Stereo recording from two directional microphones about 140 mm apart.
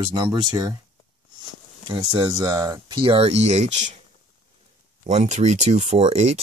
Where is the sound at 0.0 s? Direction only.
35° right (ahead or behind).